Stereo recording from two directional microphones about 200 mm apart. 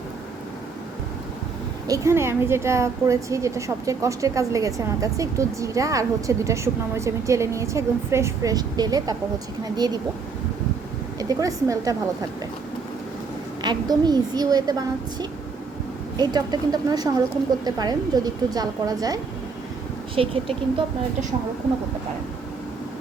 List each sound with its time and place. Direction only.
1.9 s a woman's voice: 15° right (ahead or behind)
11.2 s a woman's voice: 20° right (ahead or behind)
13.6 s a woman's voice: 20° right (ahead or behind)